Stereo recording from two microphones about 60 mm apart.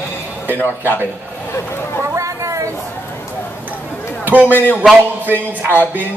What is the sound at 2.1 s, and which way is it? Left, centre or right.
Chatter, right.